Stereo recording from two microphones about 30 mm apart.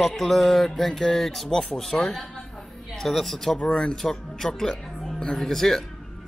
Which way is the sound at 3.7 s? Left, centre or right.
Left.